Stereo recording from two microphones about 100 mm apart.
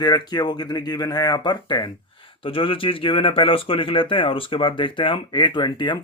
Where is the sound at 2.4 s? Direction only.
65° left (ahead or behind).